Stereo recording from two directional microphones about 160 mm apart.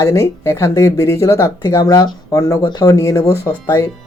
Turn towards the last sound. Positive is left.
turn(degrees=20)  # may be behind; listen again after turning